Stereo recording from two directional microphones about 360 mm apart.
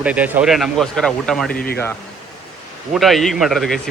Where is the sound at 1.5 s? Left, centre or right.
Left.